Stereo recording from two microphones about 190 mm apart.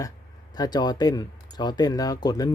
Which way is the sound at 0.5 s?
20° left (ahead or behind).